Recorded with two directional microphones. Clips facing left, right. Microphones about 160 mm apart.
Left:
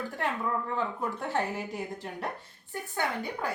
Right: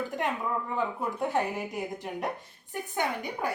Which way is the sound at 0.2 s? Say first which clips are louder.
Left 2 dB; 15° right (ahead or behind).